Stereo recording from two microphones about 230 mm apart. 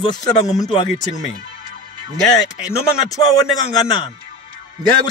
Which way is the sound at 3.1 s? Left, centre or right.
Centre.